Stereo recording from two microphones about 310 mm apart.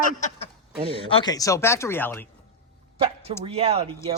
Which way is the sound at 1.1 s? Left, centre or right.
Centre.